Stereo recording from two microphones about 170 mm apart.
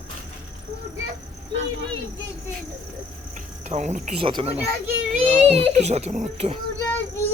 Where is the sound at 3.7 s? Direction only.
45° right (ahead or behind).